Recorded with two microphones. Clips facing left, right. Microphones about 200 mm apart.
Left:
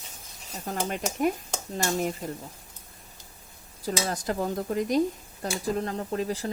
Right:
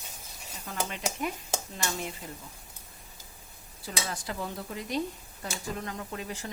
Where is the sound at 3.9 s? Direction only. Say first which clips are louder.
Left 7 dB; 40° left (ahead or behind).